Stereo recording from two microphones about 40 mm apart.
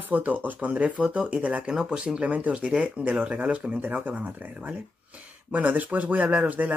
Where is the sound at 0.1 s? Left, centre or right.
Right.